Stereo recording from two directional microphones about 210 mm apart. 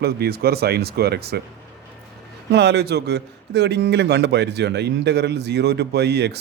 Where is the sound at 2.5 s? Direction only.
55° right (ahead or behind).